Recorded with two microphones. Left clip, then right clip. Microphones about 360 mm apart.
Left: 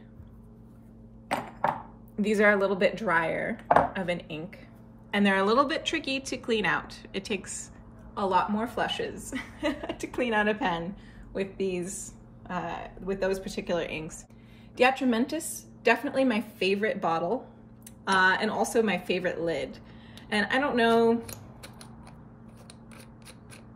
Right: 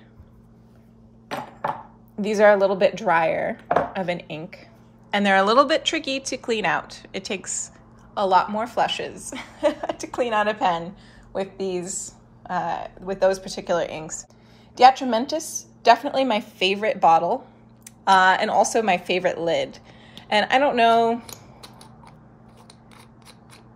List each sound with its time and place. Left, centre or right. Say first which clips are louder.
2.2 s a woman's voice: right 7 dB; centre